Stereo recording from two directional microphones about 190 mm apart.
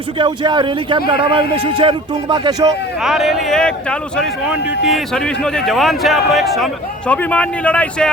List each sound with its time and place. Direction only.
0.2 s a man's voice: 25° right (ahead or behind)
3.0 s speech: centre (ahead or behind)